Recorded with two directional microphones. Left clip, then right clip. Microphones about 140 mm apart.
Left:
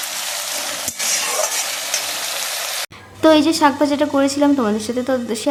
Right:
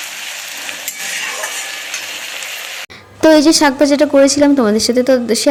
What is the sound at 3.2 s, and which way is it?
A woman's voice, 35° right (ahead or behind).